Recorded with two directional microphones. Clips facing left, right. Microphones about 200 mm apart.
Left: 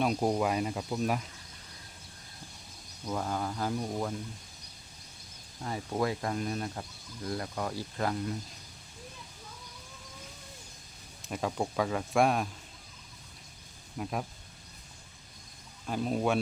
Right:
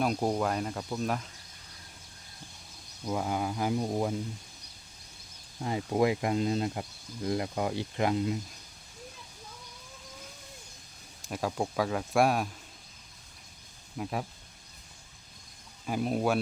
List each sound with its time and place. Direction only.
0.0 s speech: centre (ahead or behind)
3.1 s speech: 10° right (ahead or behind)
5.6 s speech: 20° right (ahead or behind)
11.2 s speech: centre (ahead or behind)
14.0 s speech: centre (ahead or behind)
15.9 s speech: 5° right (ahead or behind)